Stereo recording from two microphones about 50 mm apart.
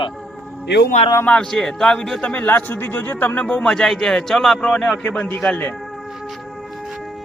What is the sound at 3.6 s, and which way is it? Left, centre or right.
A man's voice, centre.